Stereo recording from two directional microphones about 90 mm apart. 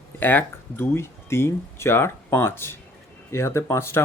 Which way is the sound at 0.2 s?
20° left (ahead or behind).